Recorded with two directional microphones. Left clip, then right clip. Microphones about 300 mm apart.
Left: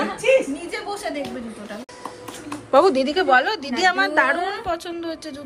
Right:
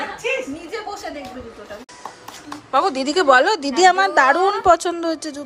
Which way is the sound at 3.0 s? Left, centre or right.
Centre.